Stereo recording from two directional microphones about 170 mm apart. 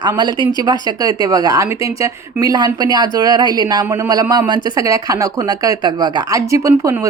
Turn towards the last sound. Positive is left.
turn(degrees=-20)  # may be behind; listen again after turning